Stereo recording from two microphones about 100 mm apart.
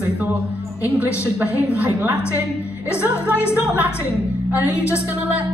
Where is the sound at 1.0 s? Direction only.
15° right (ahead or behind).